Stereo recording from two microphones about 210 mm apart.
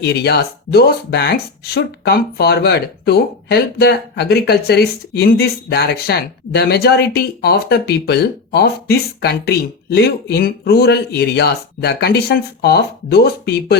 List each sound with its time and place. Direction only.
0.0 s speech: 50° left (ahead or behind)